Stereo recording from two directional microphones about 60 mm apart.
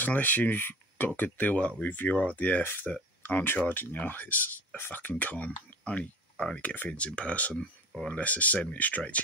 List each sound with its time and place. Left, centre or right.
0.0 s speech: left
2.6 s speech: left
2.9 s speech: left
5.2 s speech: left